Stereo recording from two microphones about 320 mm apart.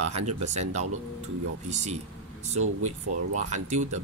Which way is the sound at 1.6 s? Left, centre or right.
Right.